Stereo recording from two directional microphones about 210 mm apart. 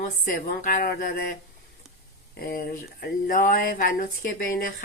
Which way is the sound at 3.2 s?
40° left (ahead or behind).